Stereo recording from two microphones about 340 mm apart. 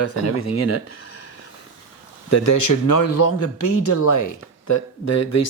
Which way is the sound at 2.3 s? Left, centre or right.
Left.